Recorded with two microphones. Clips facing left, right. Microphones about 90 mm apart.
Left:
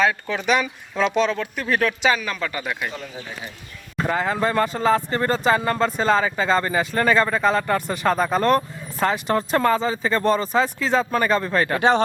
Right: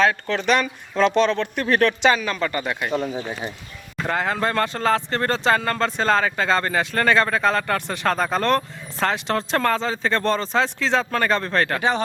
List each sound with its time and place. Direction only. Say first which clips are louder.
0.0 s speech: right 1 dB; 10° left (ahead or behind)
2.9 s speech: right 9 dB; 35° right (ahead or behind)
4.0 s speech: left 1 dB; 5° left (ahead or behind)